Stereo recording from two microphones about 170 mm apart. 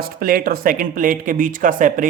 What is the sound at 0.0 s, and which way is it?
Speech, 60° right (ahead or behind).